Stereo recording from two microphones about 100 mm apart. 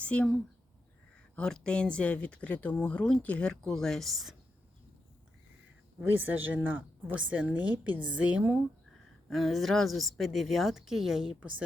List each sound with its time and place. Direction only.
0.0 s a woman's voice: 10° left (ahead or behind)
1.4 s a woman's voice: 5° left (ahead or behind)
6.0 s a woman's voice: 20° right (ahead or behind)
9.3 s a woman's voice: centre (ahead or behind)